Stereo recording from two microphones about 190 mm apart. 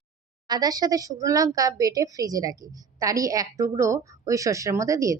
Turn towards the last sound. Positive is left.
turn(degrees=-15)  # may be behind; listen again after turning